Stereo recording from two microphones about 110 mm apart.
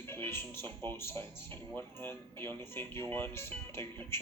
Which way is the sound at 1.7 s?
20° left (ahead or behind).